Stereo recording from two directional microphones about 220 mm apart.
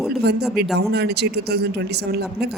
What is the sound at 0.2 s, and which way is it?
A man's voice, 50° right (ahead or behind).